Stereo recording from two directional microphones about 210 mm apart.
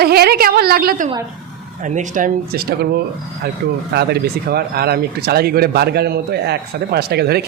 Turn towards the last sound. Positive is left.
turn(degrees=-50)  # may be behind; listen again after turning